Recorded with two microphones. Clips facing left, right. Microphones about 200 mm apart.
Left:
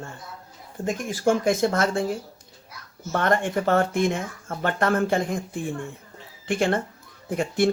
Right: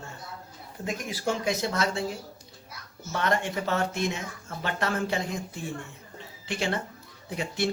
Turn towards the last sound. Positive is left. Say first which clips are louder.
# left 7 dB
turn(degrees=50)  # may be behind; listen again after turning